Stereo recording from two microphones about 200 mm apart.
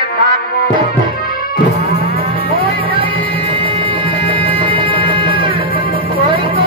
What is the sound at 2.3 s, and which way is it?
Cattle, 50° left (ahead or behind).